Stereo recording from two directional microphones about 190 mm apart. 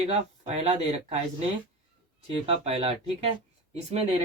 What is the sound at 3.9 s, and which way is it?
Speech, 35° right (ahead or behind).